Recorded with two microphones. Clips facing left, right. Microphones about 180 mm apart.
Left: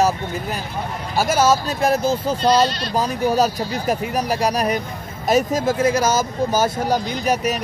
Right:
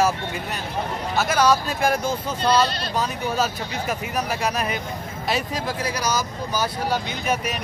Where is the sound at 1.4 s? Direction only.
25° left (ahead or behind).